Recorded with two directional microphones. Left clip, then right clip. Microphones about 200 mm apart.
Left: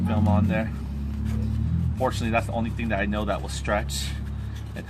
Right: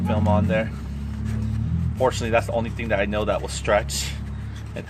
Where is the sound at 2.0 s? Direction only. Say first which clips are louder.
Right 5 dB; 35° right (ahead or behind).